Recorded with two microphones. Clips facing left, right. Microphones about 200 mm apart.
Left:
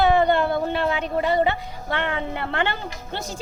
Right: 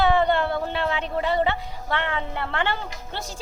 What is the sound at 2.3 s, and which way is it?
Speech, 15° left (ahead or behind).